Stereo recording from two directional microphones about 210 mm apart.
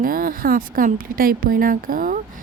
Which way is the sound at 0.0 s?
40° right (ahead or behind).